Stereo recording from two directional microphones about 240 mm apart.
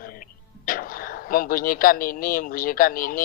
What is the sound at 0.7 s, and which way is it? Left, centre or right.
Speech, left.